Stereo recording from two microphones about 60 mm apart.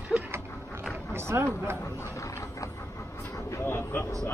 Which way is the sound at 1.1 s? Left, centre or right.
Right.